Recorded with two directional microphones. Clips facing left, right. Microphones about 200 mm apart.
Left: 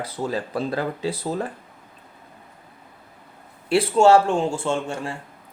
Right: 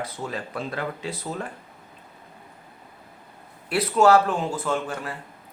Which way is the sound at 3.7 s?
30° left (ahead or behind).